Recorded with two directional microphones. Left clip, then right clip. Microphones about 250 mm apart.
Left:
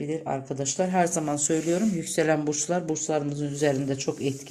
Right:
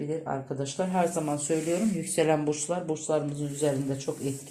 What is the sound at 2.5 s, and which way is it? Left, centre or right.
Speech, left.